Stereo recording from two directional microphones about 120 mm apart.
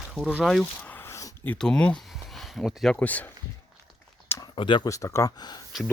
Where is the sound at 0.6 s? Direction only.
15° left (ahead or behind).